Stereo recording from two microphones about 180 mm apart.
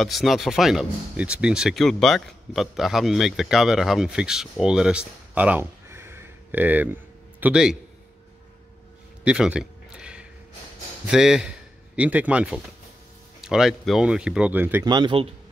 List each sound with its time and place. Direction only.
0.0 s speech: centre (ahead or behind)
9.2 s a sound: 5° right (ahead or behind)
11.1 s speech: 5° right (ahead or behind)
14.9 s speech: 25° right (ahead or behind)